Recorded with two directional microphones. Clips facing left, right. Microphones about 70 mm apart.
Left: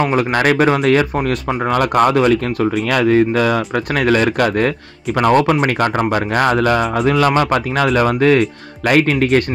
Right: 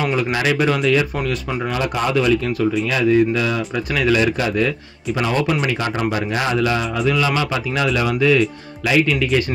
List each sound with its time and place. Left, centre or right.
0.0 s speech: left
1.5 s speech: left
1.8 s speech: left